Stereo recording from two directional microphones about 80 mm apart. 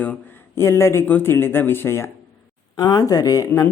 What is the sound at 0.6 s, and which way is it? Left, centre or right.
Speech, left.